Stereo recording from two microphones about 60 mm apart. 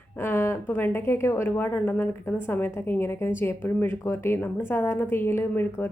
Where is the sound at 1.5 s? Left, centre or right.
Left.